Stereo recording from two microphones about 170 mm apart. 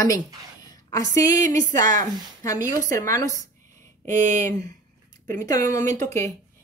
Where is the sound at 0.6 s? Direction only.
20° left (ahead or behind).